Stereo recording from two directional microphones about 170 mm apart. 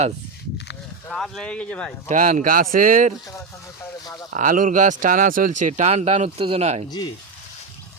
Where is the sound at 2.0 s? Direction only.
45° right (ahead or behind).